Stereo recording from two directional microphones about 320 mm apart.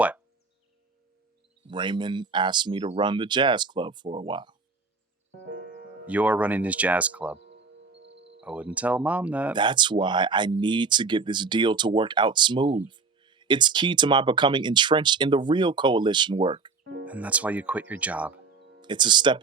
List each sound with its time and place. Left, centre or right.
1.6 s speech: centre
5.5 s music: right
6.1 s speech: centre
7.3 s music: right
8.4 s speech: centre
16.8 s music: right
17.1 s speech: centre